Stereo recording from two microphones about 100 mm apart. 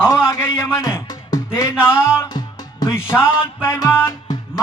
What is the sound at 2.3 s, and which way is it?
Music, 40° left (ahead or behind).